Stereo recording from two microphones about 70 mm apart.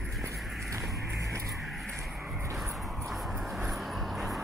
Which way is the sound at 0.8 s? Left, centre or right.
Centre.